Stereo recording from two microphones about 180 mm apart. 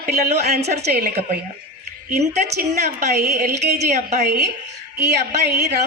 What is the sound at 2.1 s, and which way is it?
A woman's voice, 40° right (ahead or behind).